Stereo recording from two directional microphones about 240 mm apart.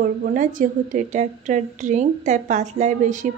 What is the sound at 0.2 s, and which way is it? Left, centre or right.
A woman's voice, right.